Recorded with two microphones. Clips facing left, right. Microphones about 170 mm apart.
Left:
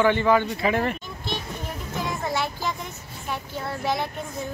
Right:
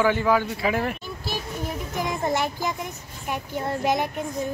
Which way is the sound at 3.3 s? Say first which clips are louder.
Right 3 dB; 15° right (ahead or behind).